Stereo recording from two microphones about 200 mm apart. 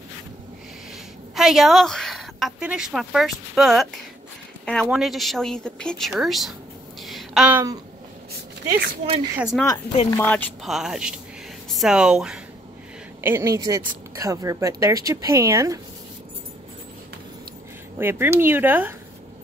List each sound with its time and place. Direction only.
1.3 s a woman's voice: centre (ahead or behind)
7.0 s a sound: centre (ahead or behind)
9.4 s speech: centre (ahead or behind)
10.1 s speech: 10° left (ahead or behind)
13.2 s a woman's voice: 15° right (ahead or behind)
17.9 s a woman's voice: 10° right (ahead or behind)